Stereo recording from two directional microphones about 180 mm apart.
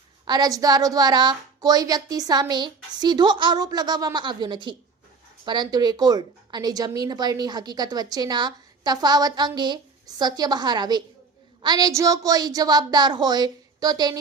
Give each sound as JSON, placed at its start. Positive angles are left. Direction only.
{"t": 0.3, "sound": "a woman's voice", "side_deg": -20}